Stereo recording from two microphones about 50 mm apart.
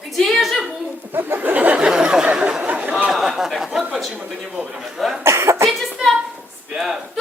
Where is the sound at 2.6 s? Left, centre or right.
Right.